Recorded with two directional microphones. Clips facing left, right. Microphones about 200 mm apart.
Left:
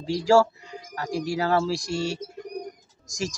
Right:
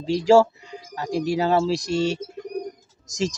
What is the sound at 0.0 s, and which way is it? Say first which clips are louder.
Speech: right 3 dB; 20° right (ahead or behind).